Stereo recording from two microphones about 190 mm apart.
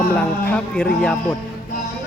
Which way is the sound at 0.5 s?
5° left (ahead or behind).